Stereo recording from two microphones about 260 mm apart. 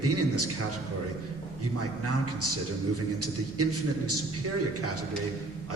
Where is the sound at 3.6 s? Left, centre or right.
Right.